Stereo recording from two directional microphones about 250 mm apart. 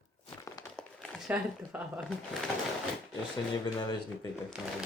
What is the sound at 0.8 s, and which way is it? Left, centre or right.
Speech, centre.